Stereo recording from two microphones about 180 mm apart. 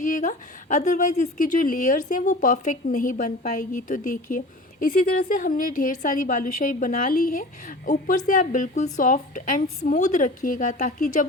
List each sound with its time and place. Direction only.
0.0 s a woman's voice: 45° left (ahead or behind)